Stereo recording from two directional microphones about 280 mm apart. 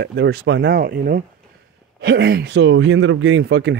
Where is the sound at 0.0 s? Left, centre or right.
Right.